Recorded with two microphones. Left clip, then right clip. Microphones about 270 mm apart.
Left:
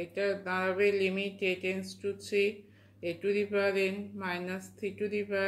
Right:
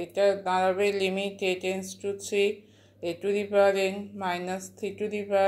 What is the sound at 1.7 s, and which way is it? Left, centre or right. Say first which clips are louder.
Speech: right 4 dB; right.